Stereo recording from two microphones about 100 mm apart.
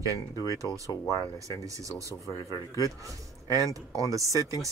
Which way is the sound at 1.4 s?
35° right (ahead or behind).